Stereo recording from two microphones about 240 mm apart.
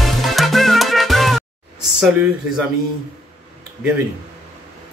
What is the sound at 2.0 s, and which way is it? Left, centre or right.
Speech, centre.